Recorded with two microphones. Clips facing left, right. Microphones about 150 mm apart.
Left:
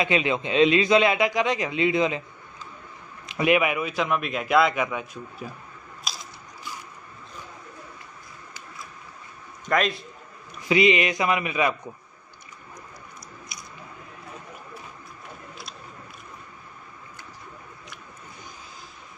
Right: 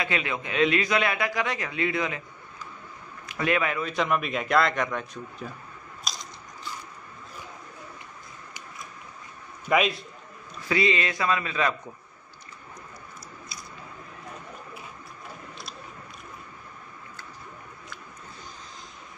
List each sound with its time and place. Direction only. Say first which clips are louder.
0.0 s a man's voice: left 6 dB; 20° left (ahead or behind)
3.3 s a man's voice: left 5 dB; 15° left (ahead or behind)
3.9 s a man's voice: even; centre (ahead or behind)
6.0 s biting: even; 5° left (ahead or behind)
9.7 s a man's voice: even; 5° right (ahead or behind)
10.7 s speech: left 5 dB; 20° left (ahead or behind)
13.5 s squish: right 1 dB; 20° left (ahead or behind)